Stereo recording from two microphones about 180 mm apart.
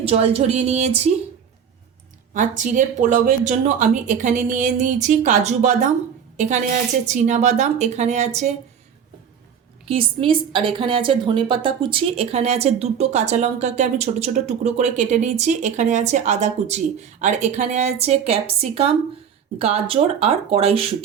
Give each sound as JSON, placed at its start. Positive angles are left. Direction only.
{"t": 0.0, "sound": "speech", "side_deg": -35}
{"t": 2.3, "sound": "a woman's voice", "side_deg": -45}
{"t": 9.8, "sound": "speech", "side_deg": -30}